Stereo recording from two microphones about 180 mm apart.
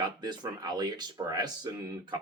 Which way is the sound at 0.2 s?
25° right (ahead or behind).